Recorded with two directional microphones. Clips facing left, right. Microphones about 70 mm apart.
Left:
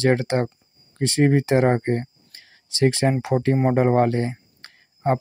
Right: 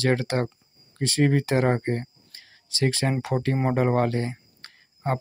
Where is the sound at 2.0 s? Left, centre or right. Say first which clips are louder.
Left 3 dB; left.